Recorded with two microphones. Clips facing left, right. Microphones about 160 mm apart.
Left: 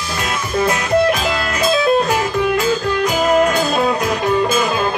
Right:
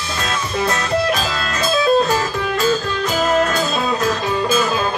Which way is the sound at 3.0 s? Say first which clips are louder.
Left 4 dB; 15° left (ahead or behind).